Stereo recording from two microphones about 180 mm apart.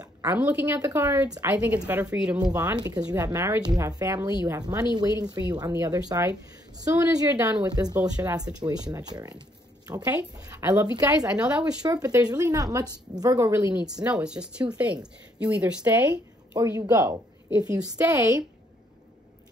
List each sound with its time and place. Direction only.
0.0 s a sound: 20° right (ahead or behind)
0.4 s a woman's voice: 10° right (ahead or behind)
11.1 s speech: 5° right (ahead or behind)
11.9 s a woman's voice: 20° right (ahead or behind)
14.0 s speech: 5° right (ahead or behind)